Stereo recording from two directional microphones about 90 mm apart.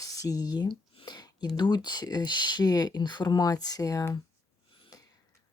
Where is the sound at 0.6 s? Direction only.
55° left (ahead or behind); by 4.2 s 40° left (ahead or behind).